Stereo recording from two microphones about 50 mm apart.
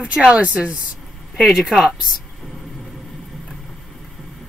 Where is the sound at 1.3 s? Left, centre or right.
Centre.